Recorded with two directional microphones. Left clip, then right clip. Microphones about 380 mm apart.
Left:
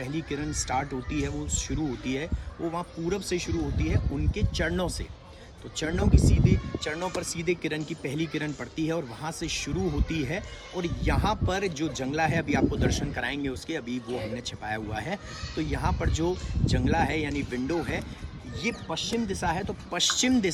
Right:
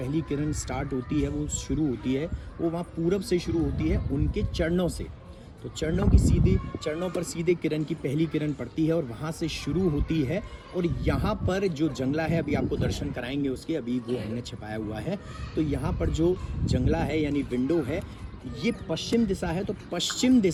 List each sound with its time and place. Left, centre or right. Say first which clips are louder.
0.0 s speech: right 3 dB; centre